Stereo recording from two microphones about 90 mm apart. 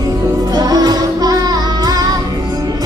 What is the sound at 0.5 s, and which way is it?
Music, 45° right (ahead or behind).